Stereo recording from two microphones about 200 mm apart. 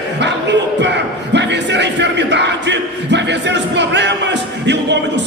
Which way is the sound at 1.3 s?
60° right (ahead or behind).